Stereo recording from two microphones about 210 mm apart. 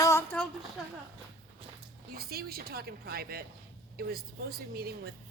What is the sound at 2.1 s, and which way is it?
Speech, 45° right (ahead or behind).